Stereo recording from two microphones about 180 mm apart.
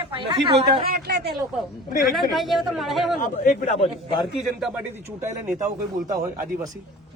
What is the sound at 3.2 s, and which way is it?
Speech, 45° left (ahead or behind).